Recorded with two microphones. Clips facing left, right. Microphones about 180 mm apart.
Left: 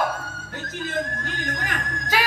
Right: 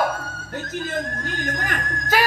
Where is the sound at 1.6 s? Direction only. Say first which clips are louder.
Right 2 dB; 50° right (ahead or behind).